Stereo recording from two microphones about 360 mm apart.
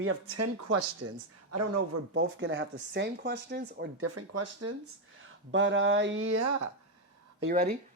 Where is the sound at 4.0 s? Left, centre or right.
Right.